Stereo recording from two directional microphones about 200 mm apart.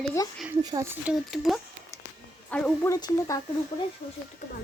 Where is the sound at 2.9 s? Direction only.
15° left (ahead or behind).